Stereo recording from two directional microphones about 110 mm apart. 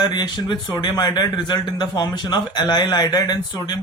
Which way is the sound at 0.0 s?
40° left (ahead or behind).